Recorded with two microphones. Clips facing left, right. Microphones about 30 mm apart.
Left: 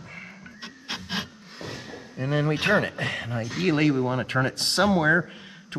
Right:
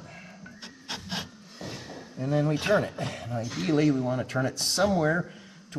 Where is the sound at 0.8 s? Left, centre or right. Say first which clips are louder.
Left 4 dB; left.